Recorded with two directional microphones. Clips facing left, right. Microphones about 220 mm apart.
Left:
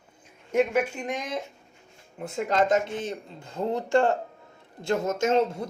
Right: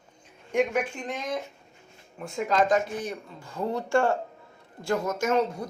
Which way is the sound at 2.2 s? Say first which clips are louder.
Even; 25° left (ahead or behind).